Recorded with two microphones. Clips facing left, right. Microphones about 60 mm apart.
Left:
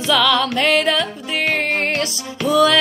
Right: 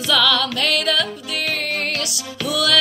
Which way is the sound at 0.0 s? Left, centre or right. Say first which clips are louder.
Left 2 dB; left.